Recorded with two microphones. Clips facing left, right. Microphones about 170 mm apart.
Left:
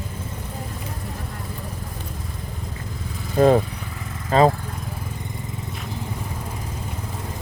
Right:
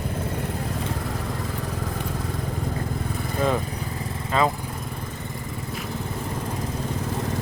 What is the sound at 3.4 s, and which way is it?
Speech, 45° left (ahead or behind).